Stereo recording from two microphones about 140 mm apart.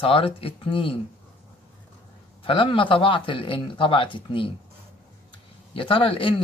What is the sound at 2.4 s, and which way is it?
A man's voice, 40° left (ahead or behind).